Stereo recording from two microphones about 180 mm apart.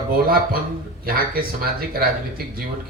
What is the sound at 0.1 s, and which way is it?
A man's voice, 55° right (ahead or behind).